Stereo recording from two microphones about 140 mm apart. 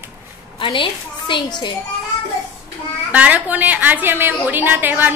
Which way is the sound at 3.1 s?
10° right (ahead or behind).